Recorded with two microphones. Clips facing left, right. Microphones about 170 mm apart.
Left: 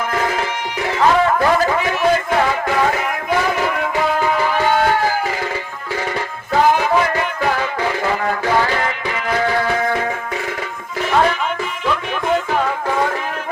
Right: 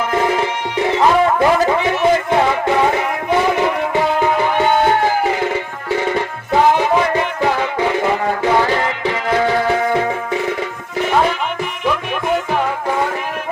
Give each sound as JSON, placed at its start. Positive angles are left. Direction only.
{"t": 0.1, "sound": "music", "side_deg": -25}
{"t": 6.5, "sound": "music", "side_deg": -20}